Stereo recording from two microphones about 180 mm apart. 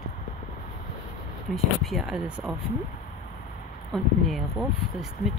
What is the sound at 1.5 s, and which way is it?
Speech, centre (ahead or behind).